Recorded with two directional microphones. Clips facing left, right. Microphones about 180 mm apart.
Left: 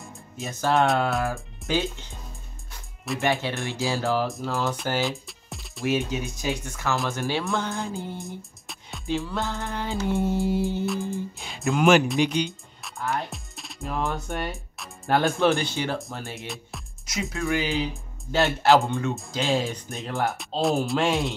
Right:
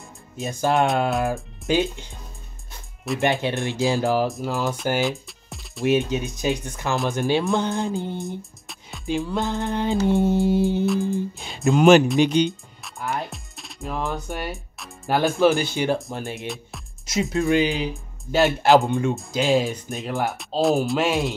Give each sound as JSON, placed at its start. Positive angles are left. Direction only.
{"t": 0.4, "sound": "speech", "side_deg": -15}
{"t": 3.2, "sound": "speech", "side_deg": -20}
{"t": 5.0, "sound": "music", "side_deg": 0}
{"t": 5.9, "sound": "speech", "side_deg": -20}
{"t": 8.4, "sound": "music", "side_deg": 0}
{"t": 9.0, "sound": "speech", "side_deg": -15}
{"t": 10.9, "sound": "speech", "side_deg": 0}
{"t": 11.5, "sound": "speech", "side_deg": -30}
{"t": 13.3, "sound": "speech", "side_deg": 0}
{"t": 16.4, "sound": "music", "side_deg": 0}
{"t": 17.0, "sound": "speech", "side_deg": -25}
{"t": 19.9, "sound": "speech", "side_deg": 0}